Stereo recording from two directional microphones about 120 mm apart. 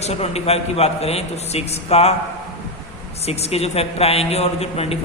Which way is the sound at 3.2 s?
60° left (ahead or behind).